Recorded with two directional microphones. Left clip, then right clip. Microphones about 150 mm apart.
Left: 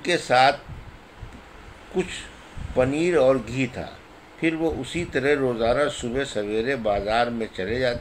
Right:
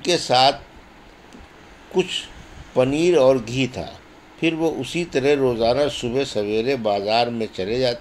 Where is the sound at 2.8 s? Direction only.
35° right (ahead or behind).